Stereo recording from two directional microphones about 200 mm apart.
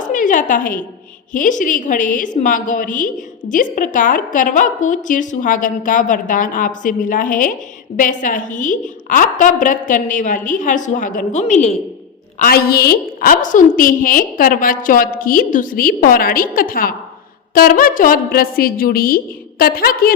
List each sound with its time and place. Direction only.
0.0 s a sound: 40° left (ahead or behind)
1.3 s a woman's voice: 40° left (ahead or behind)
12.4 s a woman's voice: 50° left (ahead or behind)